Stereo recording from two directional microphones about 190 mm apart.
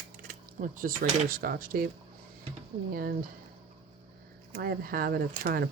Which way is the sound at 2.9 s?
50° right (ahead or behind).